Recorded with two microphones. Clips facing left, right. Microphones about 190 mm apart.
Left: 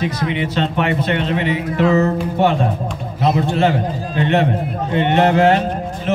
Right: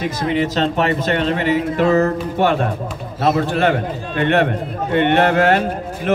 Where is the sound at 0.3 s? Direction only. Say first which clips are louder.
Right 2 dB; 40° right (ahead or behind).